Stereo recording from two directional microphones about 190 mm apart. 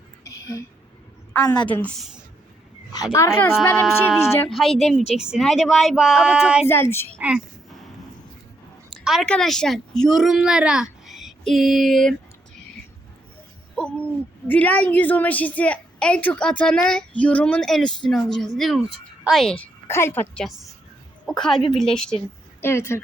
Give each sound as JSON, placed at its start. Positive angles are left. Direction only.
{"t": 0.3, "sound": "a sound", "side_deg": 20}
{"t": 1.6, "sound": "speech", "side_deg": 5}
{"t": 2.9, "sound": "speech", "side_deg": 15}
{"t": 4.4, "sound": "speech", "side_deg": 0}
{"t": 6.7, "sound": "speech", "side_deg": 10}
{"t": 7.2, "sound": "a woman's voice", "side_deg": -5}
{"t": 8.9, "sound": "speech", "side_deg": 0}
{"t": 13.7, "sound": "speech", "side_deg": 5}
{"t": 22.6, "sound": "speech", "side_deg": 15}